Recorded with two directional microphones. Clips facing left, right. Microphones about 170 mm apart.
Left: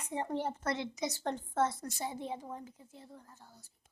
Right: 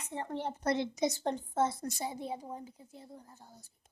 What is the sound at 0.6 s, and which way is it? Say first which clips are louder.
A child's voice: right 5 dB; 15° right (ahead or behind).